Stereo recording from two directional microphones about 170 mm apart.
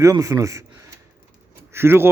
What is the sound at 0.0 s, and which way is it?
Speech, 20° right (ahead or behind).